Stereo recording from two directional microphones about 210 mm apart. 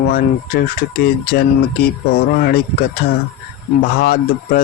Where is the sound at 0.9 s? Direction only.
45° left (ahead or behind).